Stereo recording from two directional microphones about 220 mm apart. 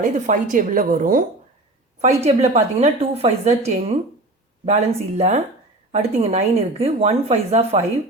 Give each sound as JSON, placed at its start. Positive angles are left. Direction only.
{"t": 0.0, "sound": "a woman's voice", "side_deg": -35}